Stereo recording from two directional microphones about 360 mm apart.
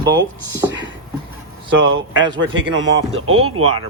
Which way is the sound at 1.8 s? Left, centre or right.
Right.